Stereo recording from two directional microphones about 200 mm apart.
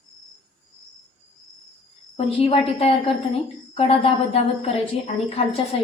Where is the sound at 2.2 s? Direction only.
30° left (ahead or behind).